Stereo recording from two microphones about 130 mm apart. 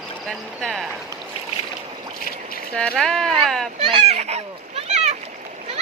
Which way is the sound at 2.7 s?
10° left (ahead or behind).